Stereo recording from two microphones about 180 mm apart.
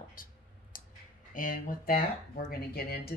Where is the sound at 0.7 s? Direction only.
50° left (ahead or behind).